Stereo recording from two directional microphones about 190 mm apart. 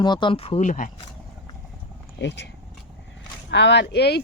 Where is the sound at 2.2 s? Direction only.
65° left (ahead or behind).